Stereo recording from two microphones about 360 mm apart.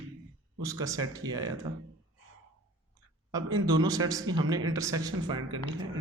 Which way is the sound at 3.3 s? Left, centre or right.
Centre.